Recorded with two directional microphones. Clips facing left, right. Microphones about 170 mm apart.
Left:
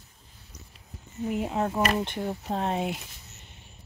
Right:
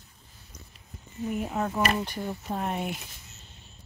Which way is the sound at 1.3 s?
20° left (ahead or behind).